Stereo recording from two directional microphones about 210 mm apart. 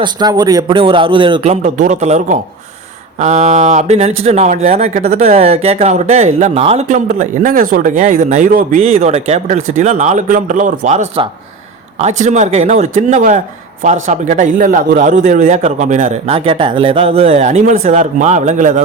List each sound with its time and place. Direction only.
0.0 s a man's voice: 20° right (ahead or behind)
1.6 s speech: 35° right (ahead or behind)